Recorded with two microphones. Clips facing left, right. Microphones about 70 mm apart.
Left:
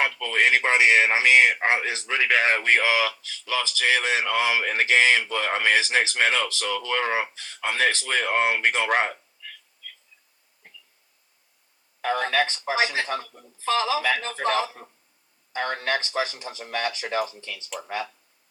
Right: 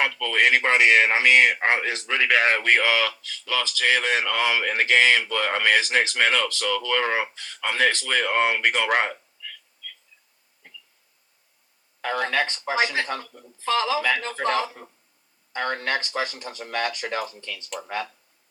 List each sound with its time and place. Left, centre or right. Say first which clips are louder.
0.2 s a man's voice: right 2 dB; centre
12.4 s a man's voice: even; centre
17.7 s speech: even; centre